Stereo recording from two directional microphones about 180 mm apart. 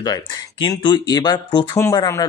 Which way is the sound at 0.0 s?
25° left (ahead or behind).